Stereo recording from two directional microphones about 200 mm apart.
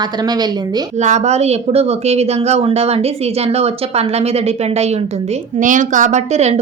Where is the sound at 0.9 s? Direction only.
35° right (ahead or behind).